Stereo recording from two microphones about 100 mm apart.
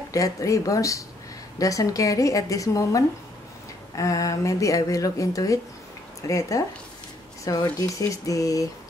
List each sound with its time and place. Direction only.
0.1 s speech: 35° left (ahead or behind)